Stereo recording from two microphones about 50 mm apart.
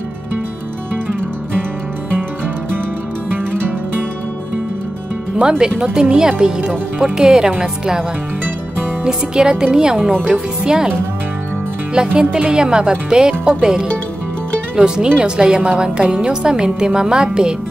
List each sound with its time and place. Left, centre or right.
5.4 s a woman's voice: centre
9.0 s a woman's voice: centre
11.9 s a woman's voice: centre
15.0 s a woman's voice: centre